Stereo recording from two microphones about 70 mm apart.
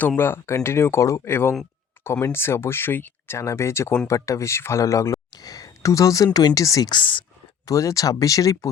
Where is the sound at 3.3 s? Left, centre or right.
Left.